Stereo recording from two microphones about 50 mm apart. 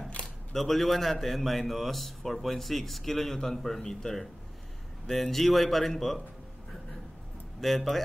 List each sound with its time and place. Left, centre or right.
0.1 s a sound: left
0.6 s a man's voice: centre
7.6 s a man's voice: centre